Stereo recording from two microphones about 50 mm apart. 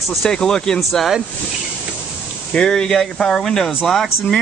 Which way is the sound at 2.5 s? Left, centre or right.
Centre.